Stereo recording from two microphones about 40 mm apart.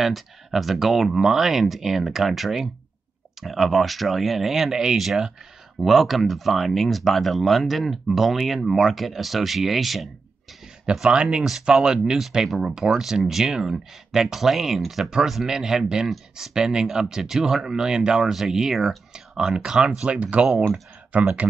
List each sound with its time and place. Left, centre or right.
0.0 s speech: centre
10.9 s speech: right
12.2 s speech: centre; by 21.5 s right